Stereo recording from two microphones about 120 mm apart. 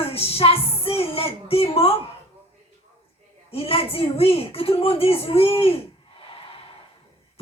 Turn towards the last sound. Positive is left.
turn(degrees=50)  # may be behind; listen again after turning